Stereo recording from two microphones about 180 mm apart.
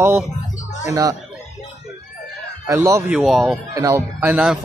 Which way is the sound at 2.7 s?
15° right (ahead or behind).